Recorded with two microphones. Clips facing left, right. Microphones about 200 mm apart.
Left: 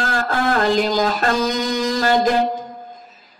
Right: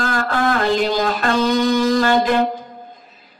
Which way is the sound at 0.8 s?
45° left (ahead or behind).